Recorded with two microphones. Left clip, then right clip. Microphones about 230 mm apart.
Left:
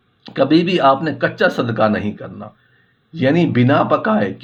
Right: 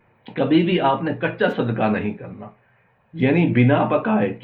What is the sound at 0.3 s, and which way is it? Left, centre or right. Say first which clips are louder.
A man's voice: left 4 dB; left.